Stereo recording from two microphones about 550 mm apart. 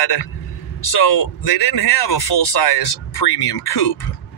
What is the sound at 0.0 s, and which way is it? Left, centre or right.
Speech, left.